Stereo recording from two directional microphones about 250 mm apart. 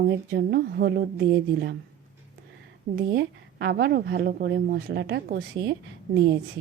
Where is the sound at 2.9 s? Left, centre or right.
Right.